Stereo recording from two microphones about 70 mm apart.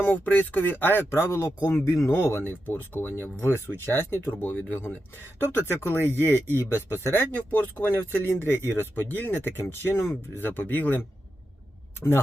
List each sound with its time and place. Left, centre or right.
0.0 s speech: left
6.7 s speech: left